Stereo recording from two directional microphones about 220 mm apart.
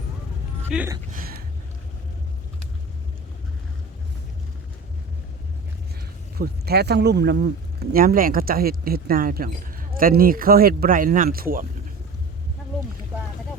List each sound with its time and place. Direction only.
0.7 s speech: 5° right (ahead or behind)
1.1 s speech: 40° right (ahead or behind)
6.3 s speech: 45° right (ahead or behind)